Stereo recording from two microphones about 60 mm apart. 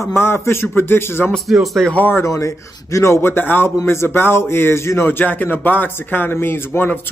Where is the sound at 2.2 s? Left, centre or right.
Left.